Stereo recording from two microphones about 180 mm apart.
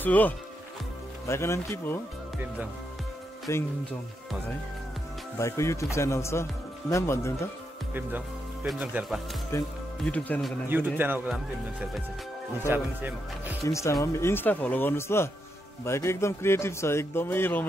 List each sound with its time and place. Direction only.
0.0 s speech: 10° left (ahead or behind)
3.5 s speech: 15° left (ahead or behind)
5.4 s speech: 15° left (ahead or behind)
8.6 s speech: 5° right (ahead or behind)
9.5 s speech: 15° left (ahead or behind)
10.7 s speech: 10° right (ahead or behind)
12.6 s speech: 10° right (ahead or behind)
13.7 s speech: 15° left (ahead or behind)